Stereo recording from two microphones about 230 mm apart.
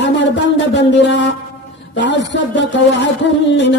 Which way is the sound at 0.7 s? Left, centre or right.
Left.